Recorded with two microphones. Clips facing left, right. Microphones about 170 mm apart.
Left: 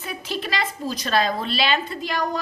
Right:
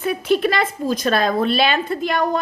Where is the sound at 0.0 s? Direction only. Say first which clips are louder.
Right 12 dB; 55° right (ahead or behind).